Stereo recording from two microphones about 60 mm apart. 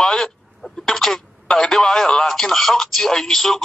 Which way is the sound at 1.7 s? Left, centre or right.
Centre.